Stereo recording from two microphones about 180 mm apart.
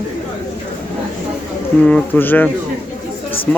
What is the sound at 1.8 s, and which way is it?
Speech, 5° left (ahead or behind).